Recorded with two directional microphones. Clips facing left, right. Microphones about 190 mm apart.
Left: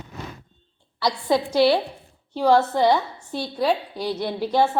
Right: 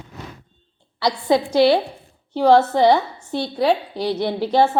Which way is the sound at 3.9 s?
30° right (ahead or behind).